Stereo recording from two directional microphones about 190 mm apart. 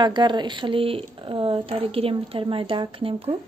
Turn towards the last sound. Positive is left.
turn(degrees=-30)  # may be behind; listen again after turning